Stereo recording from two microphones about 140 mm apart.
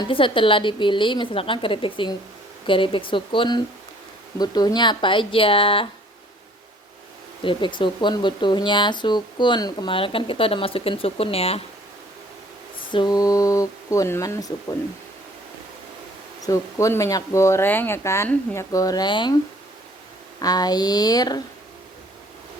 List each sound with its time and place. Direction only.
0.0 s speech: 40° left (ahead or behind)
7.4 s speech: 35° left (ahead or behind)
12.9 s speech: 30° left (ahead or behind)
16.4 s speech: 20° left (ahead or behind)
20.4 s speech: 30° left (ahead or behind)